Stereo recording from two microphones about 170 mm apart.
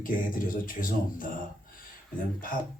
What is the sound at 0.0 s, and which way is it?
Speech, 55° left (ahead or behind).